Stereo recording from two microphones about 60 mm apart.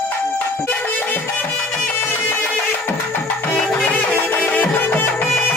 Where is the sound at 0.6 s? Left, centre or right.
Left.